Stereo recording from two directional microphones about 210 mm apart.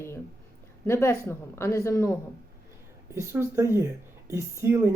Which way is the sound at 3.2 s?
10° right (ahead or behind).